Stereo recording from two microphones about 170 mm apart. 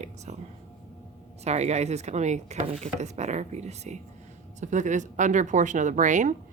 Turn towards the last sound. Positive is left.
turn(degrees=-45)  # may be behind; listen again after turning